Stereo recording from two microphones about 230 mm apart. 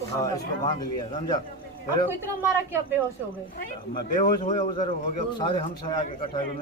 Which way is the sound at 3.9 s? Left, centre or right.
Left.